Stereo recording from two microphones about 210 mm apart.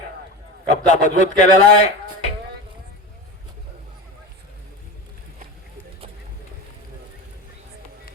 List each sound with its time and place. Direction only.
0.7 s a man's voice: 35° left (ahead or behind)